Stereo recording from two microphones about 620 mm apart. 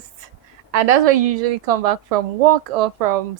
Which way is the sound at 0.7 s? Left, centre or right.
Right.